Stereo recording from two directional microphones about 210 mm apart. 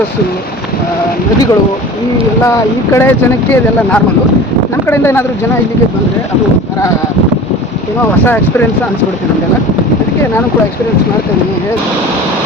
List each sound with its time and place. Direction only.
2.9 s speech: 10° left (ahead or behind)